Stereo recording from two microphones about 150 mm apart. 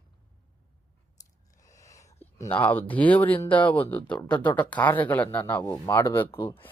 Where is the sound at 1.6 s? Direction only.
20° left (ahead or behind).